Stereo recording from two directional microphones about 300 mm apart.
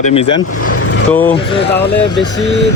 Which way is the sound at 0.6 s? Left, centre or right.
Left.